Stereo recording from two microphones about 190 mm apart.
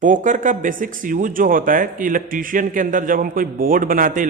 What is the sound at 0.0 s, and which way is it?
Speech, 45° right (ahead or behind).